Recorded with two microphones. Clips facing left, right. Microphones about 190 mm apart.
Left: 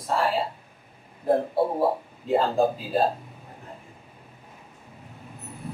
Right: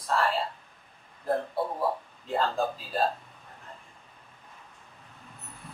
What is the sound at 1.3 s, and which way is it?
Speech, 30° left (ahead or behind).